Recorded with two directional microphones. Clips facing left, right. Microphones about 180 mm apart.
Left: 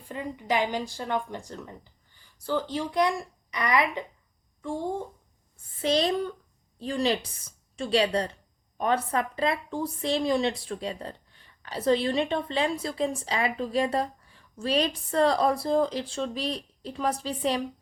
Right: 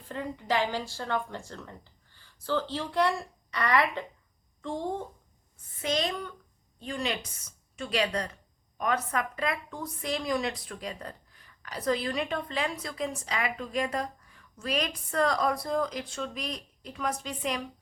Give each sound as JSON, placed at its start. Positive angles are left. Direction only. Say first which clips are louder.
{"t": 0.1, "sound": "speech", "louder": "left 1 dB", "side_deg": 15}
{"t": 5.8, "sound": "a woman's voice", "louder": "left 6 dB", "side_deg": 35}